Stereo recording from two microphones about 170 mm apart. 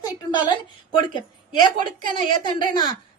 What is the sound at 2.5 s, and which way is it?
Speech, 25° left (ahead or behind).